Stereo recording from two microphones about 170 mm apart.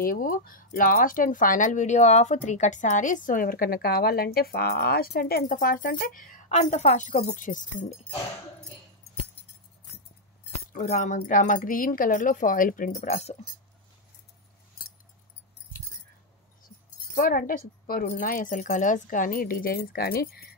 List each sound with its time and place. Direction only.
0.0 s speech: 55° left (ahead or behind)
10.7 s speech: 45° left (ahead or behind)
17.1 s speech: 60° left (ahead or behind)